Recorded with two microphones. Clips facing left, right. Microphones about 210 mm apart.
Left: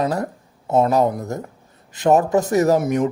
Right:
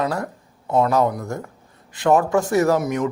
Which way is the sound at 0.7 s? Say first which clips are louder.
Left 2 dB; 20° left (ahead or behind).